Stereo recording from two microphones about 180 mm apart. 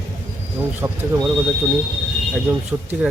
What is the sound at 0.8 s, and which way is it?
Speech, 15° right (ahead or behind).